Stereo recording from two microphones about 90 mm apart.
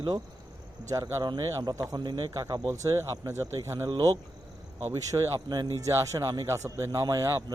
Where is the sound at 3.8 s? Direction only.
50° right (ahead or behind).